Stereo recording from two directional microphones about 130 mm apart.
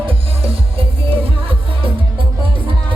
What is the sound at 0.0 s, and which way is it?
Music, 45° right (ahead or behind).